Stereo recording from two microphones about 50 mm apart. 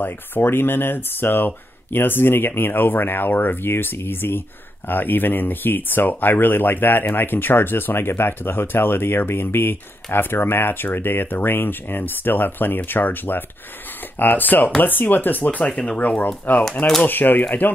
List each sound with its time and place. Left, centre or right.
0.0 s speech: left
15.7 s speech: centre
16.5 s speech: left